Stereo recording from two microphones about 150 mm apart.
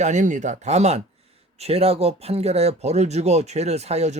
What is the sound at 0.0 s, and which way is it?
Speech, 55° right (ahead or behind).